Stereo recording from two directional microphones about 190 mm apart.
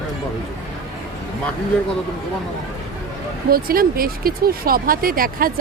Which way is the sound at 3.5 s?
50° right (ahead or behind).